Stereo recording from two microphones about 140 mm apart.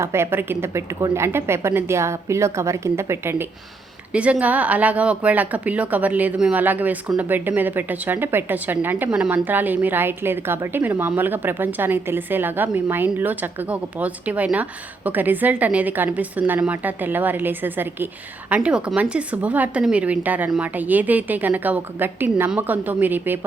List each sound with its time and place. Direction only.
0.0 s a woman's voice: 20° right (ahead or behind)